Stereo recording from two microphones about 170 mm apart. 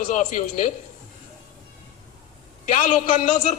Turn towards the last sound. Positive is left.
turn(degrees=45)  # may be behind; listen again after turning